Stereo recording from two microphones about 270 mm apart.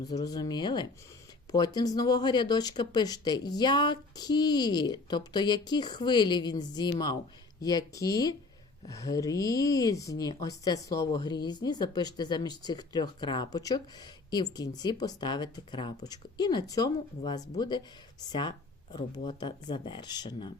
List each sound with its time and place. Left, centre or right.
0.0 s speech: centre